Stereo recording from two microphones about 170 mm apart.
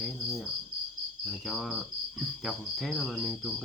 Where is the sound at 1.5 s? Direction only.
Centre (ahead or behind).